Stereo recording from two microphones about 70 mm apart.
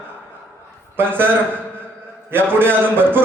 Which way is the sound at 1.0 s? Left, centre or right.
Right.